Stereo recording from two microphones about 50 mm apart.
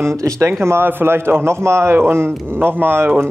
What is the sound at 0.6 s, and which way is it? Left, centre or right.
Speech, right.